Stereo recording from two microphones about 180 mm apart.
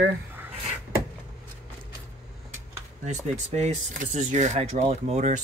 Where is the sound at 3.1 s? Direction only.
40° right (ahead or behind).